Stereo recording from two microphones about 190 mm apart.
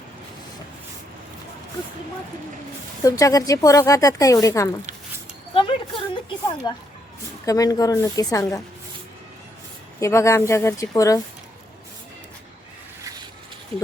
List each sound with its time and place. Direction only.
3.0 s a woman's voice: 15° left (ahead or behind)
10.0 s speech: 15° left (ahead or behind)